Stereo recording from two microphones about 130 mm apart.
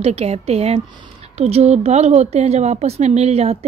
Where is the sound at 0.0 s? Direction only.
55° right (ahead or behind).